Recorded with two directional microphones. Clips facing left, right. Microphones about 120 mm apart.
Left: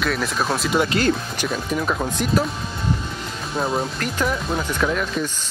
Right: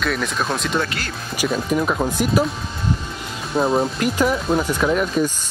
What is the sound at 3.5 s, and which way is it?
Speech, centre (ahead or behind).